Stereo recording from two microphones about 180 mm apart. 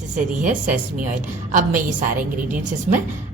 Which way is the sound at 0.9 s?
45° right (ahead or behind).